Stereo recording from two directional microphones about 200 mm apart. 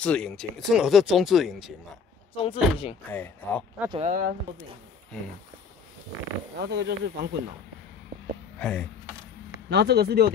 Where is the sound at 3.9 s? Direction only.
30° right (ahead or behind).